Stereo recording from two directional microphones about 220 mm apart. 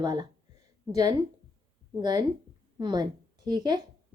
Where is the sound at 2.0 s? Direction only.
20° right (ahead or behind).